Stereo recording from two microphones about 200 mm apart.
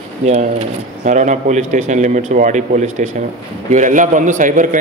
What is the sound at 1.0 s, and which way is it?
A man's voice, 35° right (ahead or behind).